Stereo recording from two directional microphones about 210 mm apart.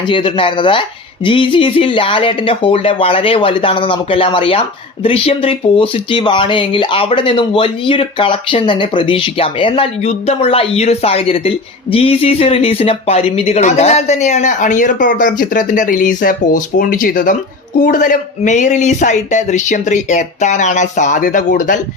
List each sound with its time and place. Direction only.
0.1 s speech: 25° left (ahead or behind)